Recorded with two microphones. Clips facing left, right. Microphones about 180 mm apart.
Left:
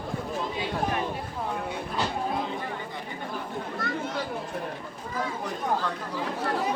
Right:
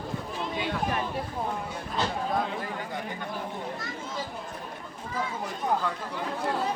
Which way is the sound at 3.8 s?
60° left (ahead or behind).